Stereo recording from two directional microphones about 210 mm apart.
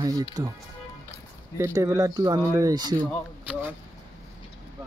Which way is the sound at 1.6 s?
15° right (ahead or behind).